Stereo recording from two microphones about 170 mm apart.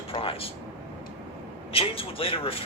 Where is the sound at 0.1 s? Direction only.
35° left (ahead or behind).